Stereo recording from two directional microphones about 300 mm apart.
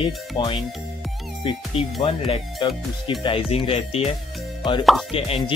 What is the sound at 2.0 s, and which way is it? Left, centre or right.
Speech, centre.